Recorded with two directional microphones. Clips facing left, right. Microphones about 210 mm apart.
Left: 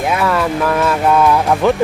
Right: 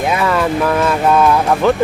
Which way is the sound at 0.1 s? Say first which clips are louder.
Even; centre (ahead or behind).